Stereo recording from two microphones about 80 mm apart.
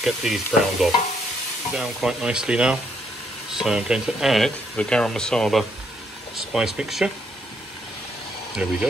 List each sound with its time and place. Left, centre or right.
0.0 s speech: centre
4.7 s speech: centre
6.3 s speech: centre
8.6 s speech: centre